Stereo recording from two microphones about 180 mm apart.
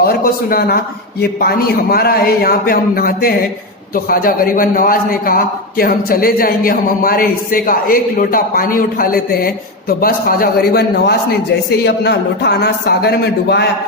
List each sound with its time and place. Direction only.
1.2 s a man's voice: 60° left (ahead or behind)